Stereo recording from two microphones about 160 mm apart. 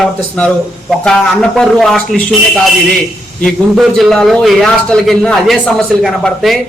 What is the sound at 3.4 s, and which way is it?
A man's voice, centre (ahead or behind).